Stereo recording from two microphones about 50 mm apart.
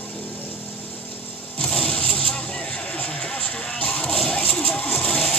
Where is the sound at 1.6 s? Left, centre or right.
Centre.